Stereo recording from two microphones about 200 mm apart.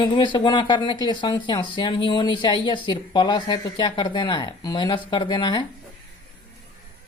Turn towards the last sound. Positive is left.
turn(degrees=20)  # may be behind; listen again after turning